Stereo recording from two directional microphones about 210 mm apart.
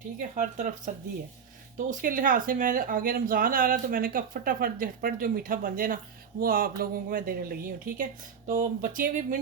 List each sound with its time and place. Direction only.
0.3 s speech: 35° right (ahead or behind)
1.9 s speech: 40° right (ahead or behind)